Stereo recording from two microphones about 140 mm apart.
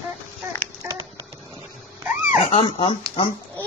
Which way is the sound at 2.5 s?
45° left (ahead or behind).